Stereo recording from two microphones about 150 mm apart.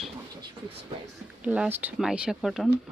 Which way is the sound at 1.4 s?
10° right (ahead or behind).